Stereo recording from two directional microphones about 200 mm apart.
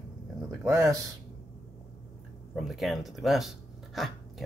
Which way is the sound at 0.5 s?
15° right (ahead or behind).